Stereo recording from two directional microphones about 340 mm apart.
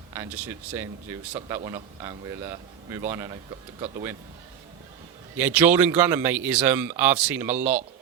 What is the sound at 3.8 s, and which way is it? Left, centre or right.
Speech, centre.